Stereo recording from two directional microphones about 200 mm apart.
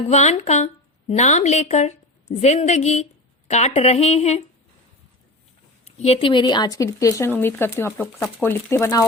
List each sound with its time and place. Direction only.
0.1 s a woman's voice: 35° left (ahead or behind)
5.8 s speech: 30° left (ahead or behind); by 9.0 s 15° left (ahead or behind)